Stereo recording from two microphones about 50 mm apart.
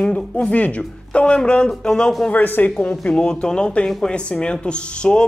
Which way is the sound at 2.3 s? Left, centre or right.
Left.